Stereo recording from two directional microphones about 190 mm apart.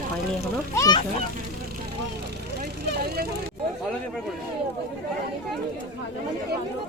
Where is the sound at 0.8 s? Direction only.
20° left (ahead or behind).